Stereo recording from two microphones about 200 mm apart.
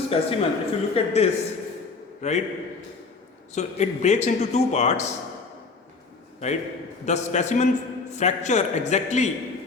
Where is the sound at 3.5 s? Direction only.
35° left (ahead or behind).